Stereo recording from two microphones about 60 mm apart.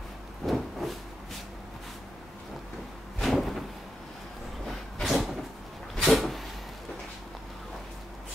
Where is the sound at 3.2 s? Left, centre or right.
Centre.